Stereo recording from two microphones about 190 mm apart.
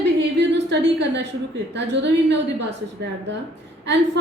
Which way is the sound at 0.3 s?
65° right (ahead or behind).